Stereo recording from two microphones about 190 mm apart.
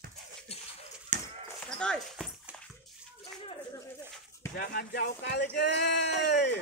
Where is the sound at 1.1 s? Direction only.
40° right (ahead or behind).